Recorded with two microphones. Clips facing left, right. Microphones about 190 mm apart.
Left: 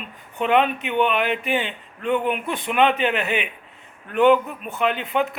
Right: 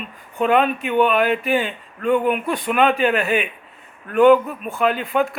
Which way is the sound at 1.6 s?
40° right (ahead or behind).